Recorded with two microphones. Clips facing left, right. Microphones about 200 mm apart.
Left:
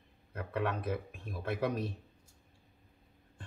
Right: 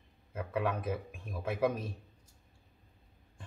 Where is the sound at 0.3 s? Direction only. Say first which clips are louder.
Right 1 dB; 10° right (ahead or behind).